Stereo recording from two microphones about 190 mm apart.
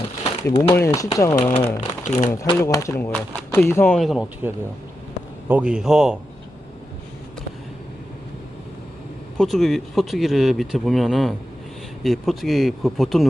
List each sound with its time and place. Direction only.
0.4 s speech: 15° left (ahead or behind)
1.8 s speech: 35° left (ahead or behind)
2.3 s speech: 15° left (ahead or behind)
3.9 s speech: centre (ahead or behind)
9.4 s speech: centre (ahead or behind)